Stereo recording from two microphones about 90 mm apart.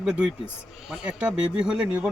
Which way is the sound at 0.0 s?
10° right (ahead or behind).